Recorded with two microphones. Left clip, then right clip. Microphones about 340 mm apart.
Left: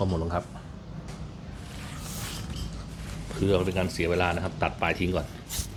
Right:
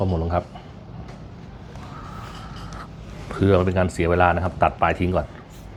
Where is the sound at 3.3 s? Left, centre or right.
Right.